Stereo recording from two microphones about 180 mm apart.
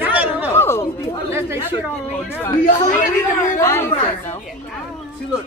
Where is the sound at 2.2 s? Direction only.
10° left (ahead or behind).